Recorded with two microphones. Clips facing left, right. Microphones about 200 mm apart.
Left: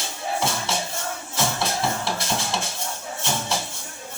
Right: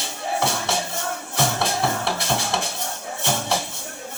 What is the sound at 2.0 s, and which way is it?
Music, 60° right (ahead or behind).